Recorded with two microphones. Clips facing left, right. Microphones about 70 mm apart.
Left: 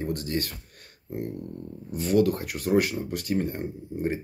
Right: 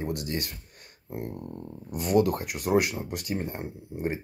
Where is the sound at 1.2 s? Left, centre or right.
Right.